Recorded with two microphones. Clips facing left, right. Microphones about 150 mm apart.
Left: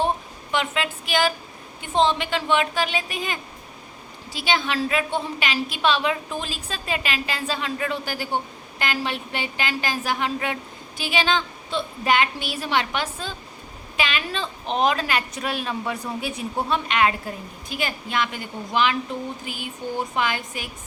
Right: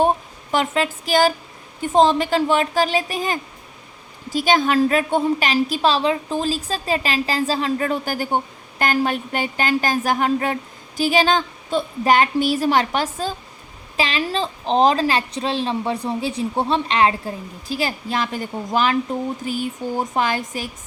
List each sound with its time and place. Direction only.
0.5 s a woman's voice: 40° right (ahead or behind)